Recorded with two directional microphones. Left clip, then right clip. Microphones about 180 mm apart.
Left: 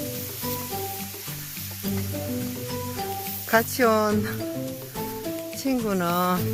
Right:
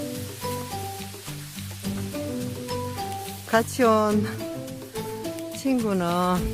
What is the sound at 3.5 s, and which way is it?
Speech, 15° right (ahead or behind).